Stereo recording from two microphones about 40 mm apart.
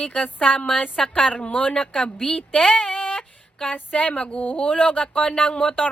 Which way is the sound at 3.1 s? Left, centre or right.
Centre.